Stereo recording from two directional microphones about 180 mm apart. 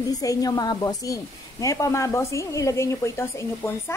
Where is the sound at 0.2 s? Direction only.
20° left (ahead or behind).